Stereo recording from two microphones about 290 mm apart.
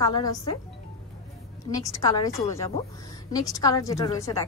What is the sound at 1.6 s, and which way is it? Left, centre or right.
A woman's voice, centre.